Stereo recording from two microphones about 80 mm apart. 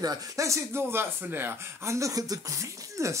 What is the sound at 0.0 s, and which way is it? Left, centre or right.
Speech, right.